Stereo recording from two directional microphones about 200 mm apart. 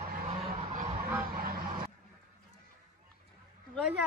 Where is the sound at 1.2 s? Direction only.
45° right (ahead or behind).